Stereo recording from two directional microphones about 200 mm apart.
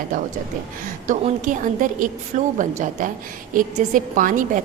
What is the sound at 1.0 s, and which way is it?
A woman's voice, 40° right (ahead or behind).